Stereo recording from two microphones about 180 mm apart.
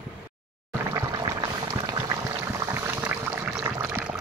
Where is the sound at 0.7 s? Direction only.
15° right (ahead or behind).